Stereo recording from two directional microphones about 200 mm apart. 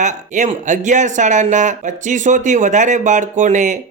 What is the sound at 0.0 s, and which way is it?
A man's voice, 40° right (ahead or behind).